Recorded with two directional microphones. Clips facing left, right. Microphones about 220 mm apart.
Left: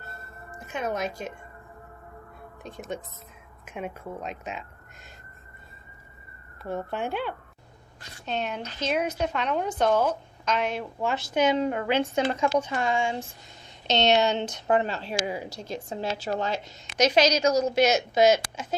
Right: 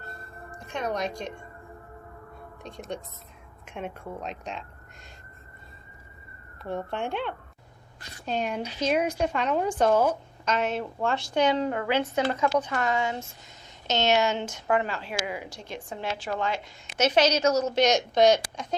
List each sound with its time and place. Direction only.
0.5 s a woman's voice: 5° left (ahead or behind)
2.6 s a woman's voice: centre (ahead or behind)
6.6 s a woman's voice: centre (ahead or behind)
8.2 s a woman's voice: 10° right (ahead or behind)
11.6 s speech: 20° left (ahead or behind)
14.1 s a woman's voice: 20° left (ahead or behind); by 16.7 s 40° left (ahead or behind)
17.0 s a woman's voice: 10° left (ahead or behind)